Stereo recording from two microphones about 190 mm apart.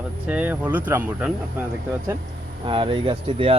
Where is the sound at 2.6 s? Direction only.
25° right (ahead or behind).